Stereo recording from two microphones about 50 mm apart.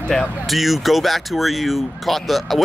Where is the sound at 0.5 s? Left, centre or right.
Centre.